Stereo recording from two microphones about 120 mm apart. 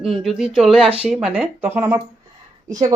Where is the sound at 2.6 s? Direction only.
30° right (ahead or behind).